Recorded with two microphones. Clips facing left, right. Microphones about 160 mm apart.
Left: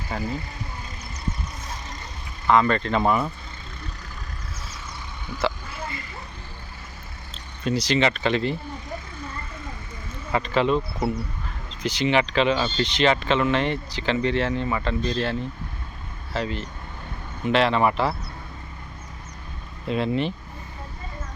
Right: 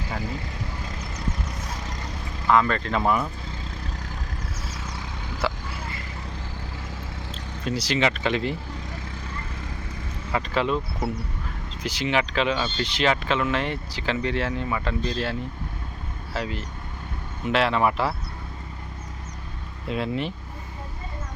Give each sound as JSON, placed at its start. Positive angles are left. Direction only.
{"t": 0.2, "sound": "speech", "side_deg": -90}
{"t": 2.5, "sound": "speech", "side_deg": 0}
{"t": 5.4, "sound": "vehicle", "side_deg": -5}
{"t": 7.6, "sound": "speech", "side_deg": -5}
{"t": 10.3, "sound": "speech", "side_deg": 0}
{"t": 11.8, "sound": "speech", "side_deg": -5}
{"t": 19.9, "sound": "speech", "side_deg": -5}